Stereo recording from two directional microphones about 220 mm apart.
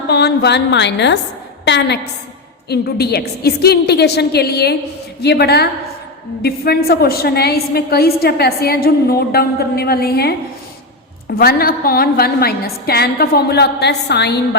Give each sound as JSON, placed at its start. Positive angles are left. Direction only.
{"t": 0.1, "sound": "a woman's voice", "side_deg": 50}
{"t": 11.3, "sound": "a woman's voice", "side_deg": 45}